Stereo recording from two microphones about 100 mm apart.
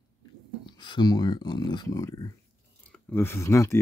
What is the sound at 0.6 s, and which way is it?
Speech, 50° left (ahead or behind).